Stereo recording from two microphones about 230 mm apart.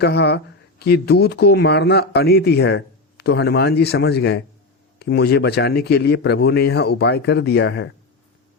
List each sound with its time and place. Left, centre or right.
0.0 s speech: left